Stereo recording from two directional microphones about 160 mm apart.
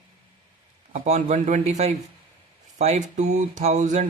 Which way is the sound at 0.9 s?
45° right (ahead or behind).